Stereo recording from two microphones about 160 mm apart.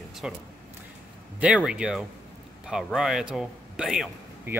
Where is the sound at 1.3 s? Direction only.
5° right (ahead or behind).